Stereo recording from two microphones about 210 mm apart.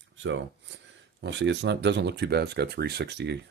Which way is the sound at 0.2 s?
65° right (ahead or behind).